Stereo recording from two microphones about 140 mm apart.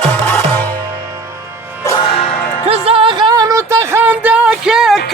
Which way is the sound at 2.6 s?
45° right (ahead or behind).